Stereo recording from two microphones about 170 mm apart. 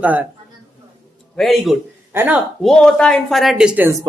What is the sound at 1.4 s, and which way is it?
A woman's voice, centre (ahead or behind).